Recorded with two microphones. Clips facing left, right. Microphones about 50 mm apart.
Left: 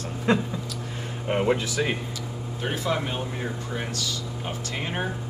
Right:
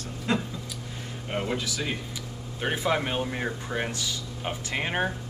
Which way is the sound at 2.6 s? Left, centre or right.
Centre.